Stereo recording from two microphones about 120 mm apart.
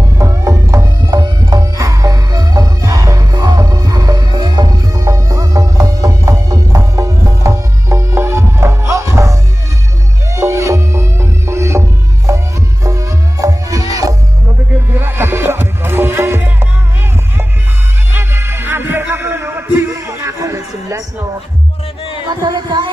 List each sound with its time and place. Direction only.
0.2 s music: 25° right (ahead or behind)
18.1 s music: 20° right (ahead or behind)
22.3 s music: 40° right (ahead or behind)